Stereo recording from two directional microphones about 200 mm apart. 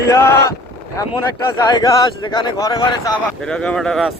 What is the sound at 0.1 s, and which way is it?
Speech, 10° left (ahead or behind).